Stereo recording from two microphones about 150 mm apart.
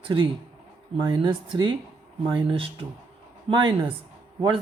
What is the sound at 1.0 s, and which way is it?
Speech, 30° right (ahead or behind).